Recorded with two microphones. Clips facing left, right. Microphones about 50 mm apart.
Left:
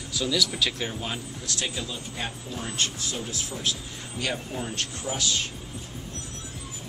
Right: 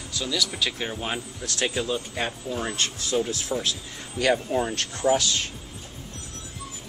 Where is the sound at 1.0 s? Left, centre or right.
Right.